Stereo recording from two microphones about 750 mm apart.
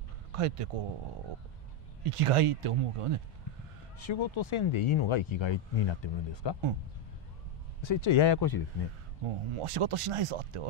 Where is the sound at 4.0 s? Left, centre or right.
Left.